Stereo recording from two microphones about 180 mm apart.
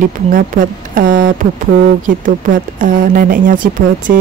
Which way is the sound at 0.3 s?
50° right (ahead or behind).